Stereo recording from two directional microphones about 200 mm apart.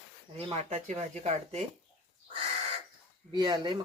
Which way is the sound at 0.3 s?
30° right (ahead or behind).